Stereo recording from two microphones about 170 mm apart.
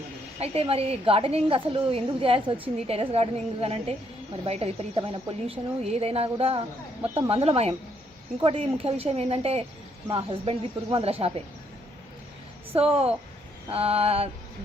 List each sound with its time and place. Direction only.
0.3 s a woman's voice: 35° right (ahead or behind)
12.7 s a woman's voice: 35° right (ahead or behind)